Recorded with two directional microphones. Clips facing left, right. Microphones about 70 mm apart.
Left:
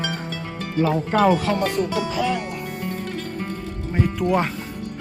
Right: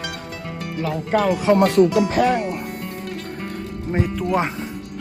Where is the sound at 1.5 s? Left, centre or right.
Right.